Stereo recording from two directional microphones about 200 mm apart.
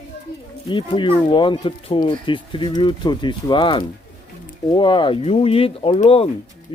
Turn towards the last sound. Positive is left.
turn(degrees=30)  # may be behind; listen again after turning